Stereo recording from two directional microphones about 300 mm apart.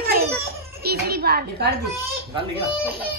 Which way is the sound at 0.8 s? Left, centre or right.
Right.